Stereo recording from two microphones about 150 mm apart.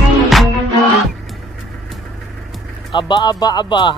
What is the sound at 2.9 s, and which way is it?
Speech, 30° left (ahead or behind).